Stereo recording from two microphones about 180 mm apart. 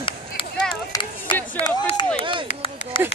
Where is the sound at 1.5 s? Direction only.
30° left (ahead or behind).